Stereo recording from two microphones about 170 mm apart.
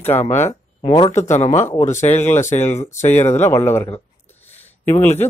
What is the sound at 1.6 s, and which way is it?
Speech, 15° left (ahead or behind).